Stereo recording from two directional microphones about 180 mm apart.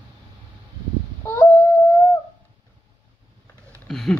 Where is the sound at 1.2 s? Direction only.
15° left (ahead or behind).